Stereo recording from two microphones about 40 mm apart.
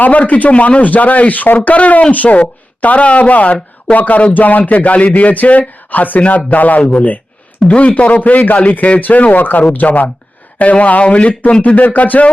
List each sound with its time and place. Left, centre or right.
0.0 s a man's voice: left